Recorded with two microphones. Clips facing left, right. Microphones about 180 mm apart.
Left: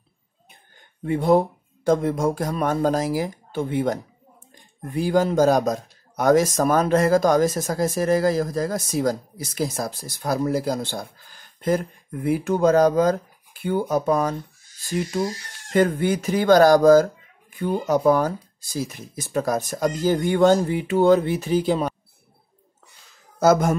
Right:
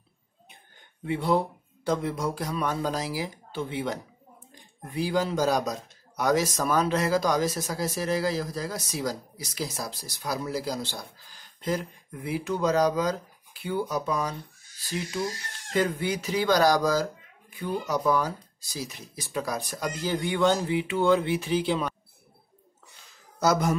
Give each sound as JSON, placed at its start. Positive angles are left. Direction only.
{"t": 1.0, "sound": "a man's voice", "side_deg": 45}
{"t": 23.4, "sound": "a man's voice", "side_deg": 50}